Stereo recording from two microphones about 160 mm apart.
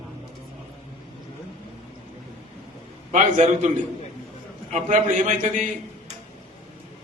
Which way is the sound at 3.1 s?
50° right (ahead or behind).